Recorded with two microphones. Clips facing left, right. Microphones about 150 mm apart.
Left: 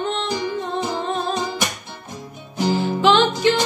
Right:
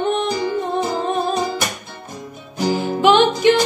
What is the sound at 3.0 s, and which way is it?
Music, 15° right (ahead or behind).